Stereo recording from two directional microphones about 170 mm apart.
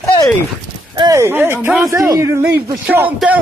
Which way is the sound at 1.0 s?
20° right (ahead or behind).